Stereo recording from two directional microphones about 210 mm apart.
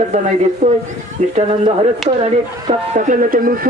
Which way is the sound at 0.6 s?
35° right (ahead or behind).